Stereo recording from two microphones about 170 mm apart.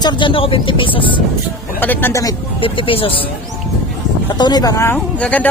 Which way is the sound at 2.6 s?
30° left (ahead or behind).